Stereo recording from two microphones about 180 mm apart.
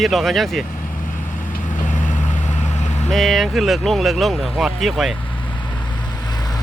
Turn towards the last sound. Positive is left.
turn(degrees=0)  # may be behind; listen again after turning